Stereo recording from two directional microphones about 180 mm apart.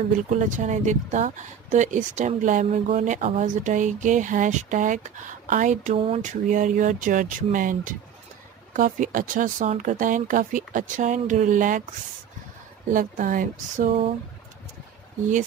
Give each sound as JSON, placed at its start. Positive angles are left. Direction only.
{"t": 0.4, "sound": "speech", "side_deg": -45}
{"t": 12.9, "sound": "speech", "side_deg": -50}